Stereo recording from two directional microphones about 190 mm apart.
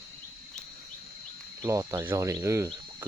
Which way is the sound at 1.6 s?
15° right (ahead or behind).